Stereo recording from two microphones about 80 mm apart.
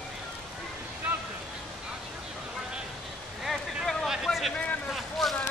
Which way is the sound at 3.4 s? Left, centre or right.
Centre.